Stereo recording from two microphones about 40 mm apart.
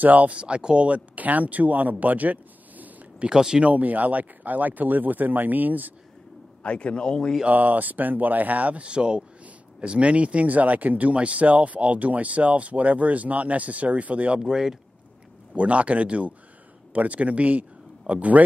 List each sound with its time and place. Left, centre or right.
0.0 s speech: right
0.4 s speech: right
0.8 s speech: right
3.3 s speech: centre
3.6 s speech: right
6.6 s a man's voice: left
7.4 s speech: right
8.8 s speech: right
14.4 s speech: centre
15.5 s speech: right